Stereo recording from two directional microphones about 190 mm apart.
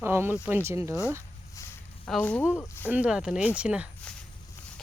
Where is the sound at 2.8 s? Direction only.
5° right (ahead or behind).